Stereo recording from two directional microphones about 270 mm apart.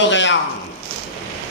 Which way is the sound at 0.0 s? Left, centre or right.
Left.